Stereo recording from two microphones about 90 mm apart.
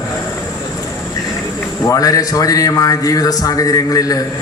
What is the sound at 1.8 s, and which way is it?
A man's voice, 40° left (ahead or behind).